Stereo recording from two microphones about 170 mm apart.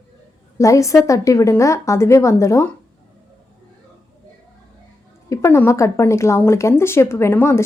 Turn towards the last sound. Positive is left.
turn(degrees=15)  # may be behind; listen again after turning